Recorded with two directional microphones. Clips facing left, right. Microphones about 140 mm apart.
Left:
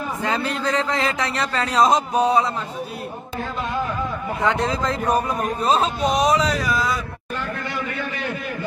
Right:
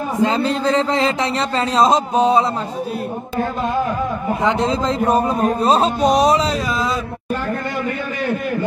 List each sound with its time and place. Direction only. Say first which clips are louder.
0.2 s a man's voice: right 7 dB; 25° right (ahead or behind)
4.4 s a man's voice: right 2 dB; 20° right (ahead or behind)